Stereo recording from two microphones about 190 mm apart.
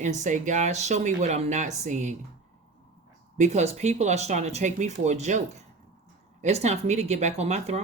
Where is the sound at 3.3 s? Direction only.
35° right (ahead or behind).